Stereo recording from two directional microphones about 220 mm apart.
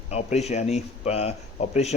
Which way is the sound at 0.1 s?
30° left (ahead or behind).